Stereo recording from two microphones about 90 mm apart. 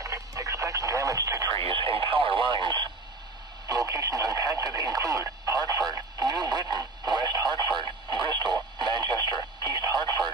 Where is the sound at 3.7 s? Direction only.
45° right (ahead or behind).